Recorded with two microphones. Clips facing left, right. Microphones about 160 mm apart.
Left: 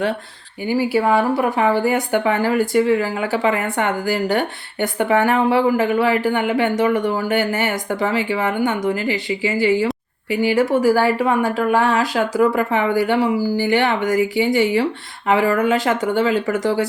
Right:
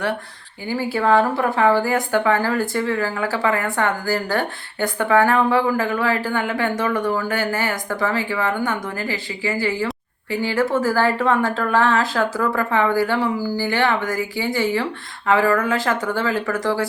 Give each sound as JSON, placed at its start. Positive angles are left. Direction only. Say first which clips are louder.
{"t": 0.7, "sound": "speech", "louder": "left 1 dB", "side_deg": 15}